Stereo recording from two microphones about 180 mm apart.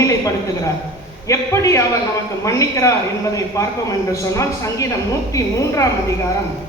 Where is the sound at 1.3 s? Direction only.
15° left (ahead or behind).